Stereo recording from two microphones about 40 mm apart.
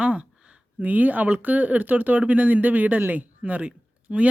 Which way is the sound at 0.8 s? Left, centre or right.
Right.